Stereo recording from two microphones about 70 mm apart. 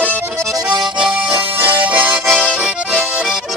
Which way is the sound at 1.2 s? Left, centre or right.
Right.